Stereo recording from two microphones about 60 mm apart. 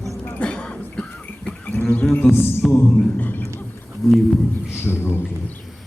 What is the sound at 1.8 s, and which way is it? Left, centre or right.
Music, left.